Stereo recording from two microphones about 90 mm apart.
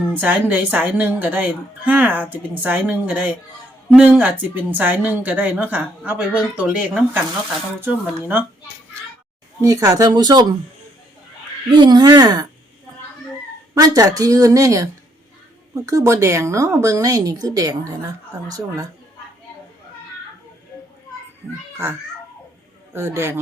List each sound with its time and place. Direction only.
0.1 s a woman's voice: 20° right (ahead or behind)
7.8 s a woman's voice: 25° right (ahead or behind)
9.6 s speech: 35° right (ahead or behind); by 10.4 s 50° right (ahead or behind)
11.7 s speech: 55° right (ahead or behind)
13.7 s speech: 40° right (ahead or behind)
22.9 s a woman's voice: 30° right (ahead or behind)